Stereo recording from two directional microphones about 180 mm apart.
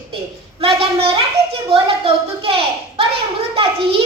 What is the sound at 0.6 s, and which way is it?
A child's voice, 30° right (ahead or behind).